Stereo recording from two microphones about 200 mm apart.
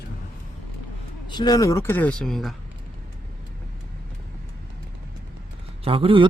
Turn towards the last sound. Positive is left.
turn(degrees=-25)  # may be behind; listen again after turning